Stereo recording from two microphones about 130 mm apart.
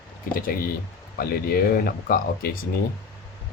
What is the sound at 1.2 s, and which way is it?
Speech, 90° left.